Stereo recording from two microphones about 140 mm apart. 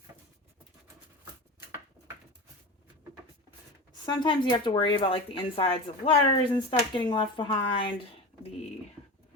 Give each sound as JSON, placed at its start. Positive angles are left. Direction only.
{"t": 4.0, "sound": "speech", "side_deg": 30}